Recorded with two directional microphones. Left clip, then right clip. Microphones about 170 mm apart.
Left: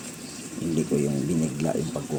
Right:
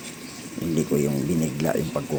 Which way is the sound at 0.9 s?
15° right (ahead or behind).